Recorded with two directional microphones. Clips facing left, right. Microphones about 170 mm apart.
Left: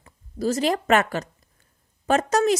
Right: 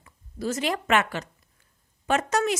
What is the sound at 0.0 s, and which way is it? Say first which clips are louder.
A woman's voice: left 5 dB; 35° left (ahead or behind).